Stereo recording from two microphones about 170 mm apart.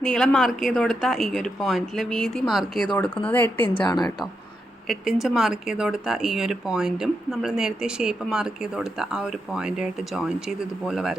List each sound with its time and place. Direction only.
0.0 s speech: 5° left (ahead or behind)
3.8 s a woman's voice: 25° left (ahead or behind)
4.9 s speech: centre (ahead or behind)